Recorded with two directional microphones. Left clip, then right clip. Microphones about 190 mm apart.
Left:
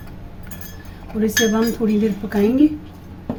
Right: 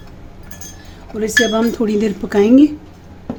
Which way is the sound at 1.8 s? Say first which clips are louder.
Right 3 dB; 55° right (ahead or behind).